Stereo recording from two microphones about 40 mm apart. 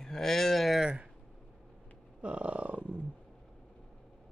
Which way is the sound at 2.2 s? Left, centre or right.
Right.